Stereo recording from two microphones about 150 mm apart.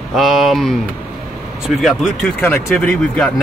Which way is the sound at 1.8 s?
Centre (ahead or behind).